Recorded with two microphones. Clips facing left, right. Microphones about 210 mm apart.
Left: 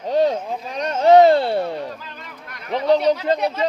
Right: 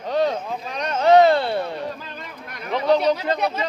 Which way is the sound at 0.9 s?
40° left (ahead or behind).